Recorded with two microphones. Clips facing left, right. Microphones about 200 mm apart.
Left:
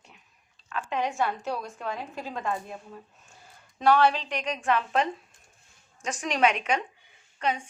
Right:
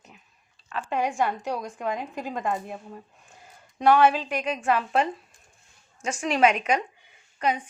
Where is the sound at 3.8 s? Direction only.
15° right (ahead or behind).